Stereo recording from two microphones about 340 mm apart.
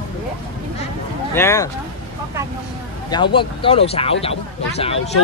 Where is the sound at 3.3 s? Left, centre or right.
Centre.